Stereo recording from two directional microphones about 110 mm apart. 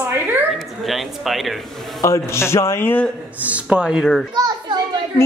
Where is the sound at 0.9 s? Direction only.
Centre (ahead or behind).